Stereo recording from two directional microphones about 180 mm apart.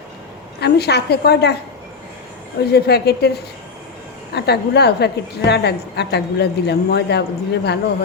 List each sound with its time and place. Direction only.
0.6 s a woman's voice: 65° left (ahead or behind)
2.7 s a woman's voice: 65° left (ahead or behind)